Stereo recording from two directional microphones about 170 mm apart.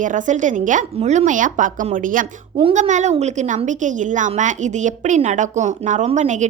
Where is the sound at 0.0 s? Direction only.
50° right (ahead or behind).